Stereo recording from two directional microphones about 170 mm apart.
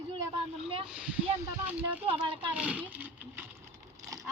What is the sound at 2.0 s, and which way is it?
Speech, 35° right (ahead or behind).